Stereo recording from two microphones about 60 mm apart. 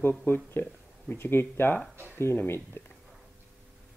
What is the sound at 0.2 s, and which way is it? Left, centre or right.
Speech, left.